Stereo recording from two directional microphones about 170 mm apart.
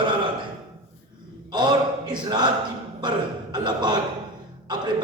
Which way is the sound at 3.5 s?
25° right (ahead or behind).